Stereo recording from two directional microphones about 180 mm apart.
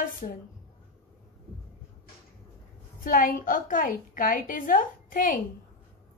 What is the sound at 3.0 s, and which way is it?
Speech, 50° left (ahead or behind).